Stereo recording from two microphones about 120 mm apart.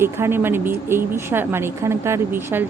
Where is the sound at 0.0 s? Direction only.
20° right (ahead or behind).